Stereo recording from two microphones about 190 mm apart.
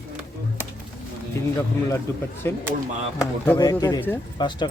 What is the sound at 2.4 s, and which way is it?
Speech, 10° left (ahead or behind).